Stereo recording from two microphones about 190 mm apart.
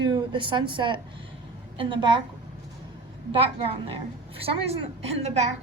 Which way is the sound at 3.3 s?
30° right (ahead or behind).